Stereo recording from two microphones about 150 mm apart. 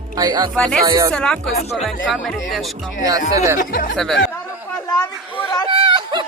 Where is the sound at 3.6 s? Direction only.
70° left (ahead or behind).